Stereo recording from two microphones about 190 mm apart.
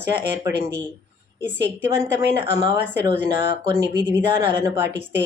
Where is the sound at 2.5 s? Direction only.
15° right (ahead or behind).